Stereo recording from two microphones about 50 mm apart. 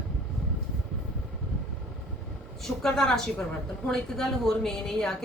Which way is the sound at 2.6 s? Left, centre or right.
Centre.